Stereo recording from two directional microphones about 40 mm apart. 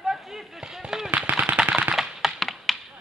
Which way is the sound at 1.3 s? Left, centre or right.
Right.